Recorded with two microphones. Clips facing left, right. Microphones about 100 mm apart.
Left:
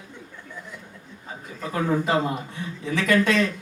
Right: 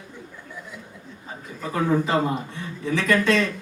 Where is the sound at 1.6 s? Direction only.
5° left (ahead or behind).